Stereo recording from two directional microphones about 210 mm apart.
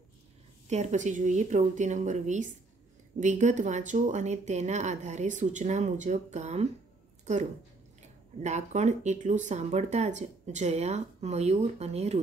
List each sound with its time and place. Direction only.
0.7 s speech: 35° right (ahead or behind)
8.4 s speech: 35° right (ahead or behind)